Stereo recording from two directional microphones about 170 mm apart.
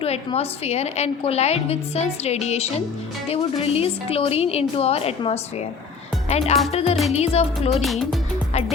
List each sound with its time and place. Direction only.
0.0 s a woman's voice: 35° left (ahead or behind)
7.8 s speech: centre (ahead or behind)